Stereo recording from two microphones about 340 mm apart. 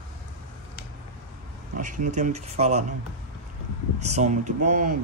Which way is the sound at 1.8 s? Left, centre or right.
Right.